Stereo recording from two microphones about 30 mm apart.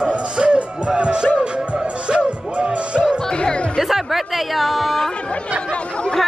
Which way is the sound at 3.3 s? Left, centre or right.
Left.